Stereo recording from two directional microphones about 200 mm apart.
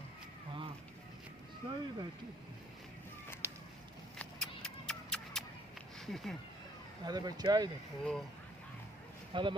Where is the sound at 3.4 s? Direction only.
10° right (ahead or behind).